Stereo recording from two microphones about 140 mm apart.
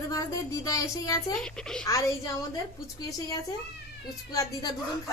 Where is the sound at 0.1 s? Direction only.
25° left (ahead or behind).